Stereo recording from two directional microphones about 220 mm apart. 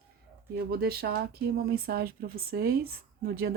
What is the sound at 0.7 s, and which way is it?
Speech, 45° right (ahead or behind).